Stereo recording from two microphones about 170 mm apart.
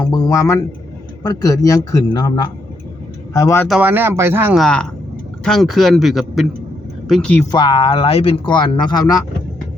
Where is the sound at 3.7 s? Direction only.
10° right (ahead or behind).